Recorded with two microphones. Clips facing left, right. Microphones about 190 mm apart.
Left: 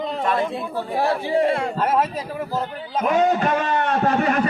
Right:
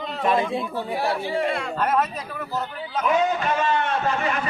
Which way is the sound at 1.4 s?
25° left (ahead or behind).